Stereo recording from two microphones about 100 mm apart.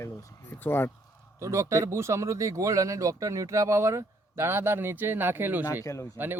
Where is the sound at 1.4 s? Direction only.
30° right (ahead or behind).